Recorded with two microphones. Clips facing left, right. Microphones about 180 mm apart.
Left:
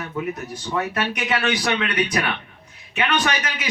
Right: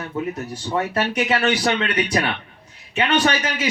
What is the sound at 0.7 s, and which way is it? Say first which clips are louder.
Speech: right 3 dB; 30° right (ahead or behind).